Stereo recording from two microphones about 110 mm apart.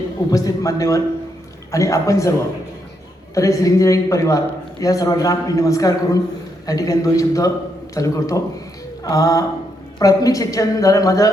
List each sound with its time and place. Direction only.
0.3 s a man's voice: 30° left (ahead or behind)
3.3 s a man's voice: 30° left (ahead or behind)